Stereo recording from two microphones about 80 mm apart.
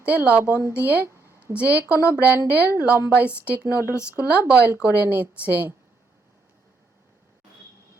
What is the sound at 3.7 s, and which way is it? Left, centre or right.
Speech, left.